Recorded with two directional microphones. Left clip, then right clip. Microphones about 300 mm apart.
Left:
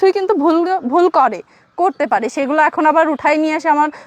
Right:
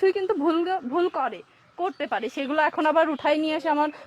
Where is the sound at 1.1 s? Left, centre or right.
Left.